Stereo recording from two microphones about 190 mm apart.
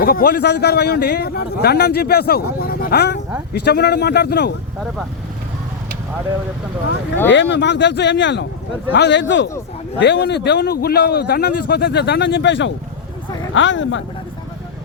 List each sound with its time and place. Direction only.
0.0 s a man's voice: 50° left (ahead or behind)
7.3 s a man's voice: 70° left (ahead or behind)